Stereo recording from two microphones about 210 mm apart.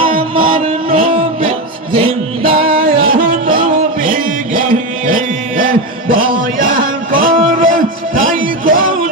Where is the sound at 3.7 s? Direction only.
40° right (ahead or behind).